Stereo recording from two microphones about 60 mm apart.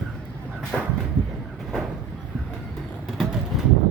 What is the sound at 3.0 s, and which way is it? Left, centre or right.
Vehicle, centre.